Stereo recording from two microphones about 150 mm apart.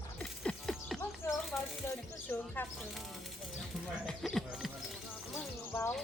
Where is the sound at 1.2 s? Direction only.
20° left (ahead or behind).